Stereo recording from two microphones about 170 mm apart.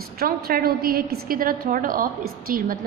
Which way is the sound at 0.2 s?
60° right (ahead or behind).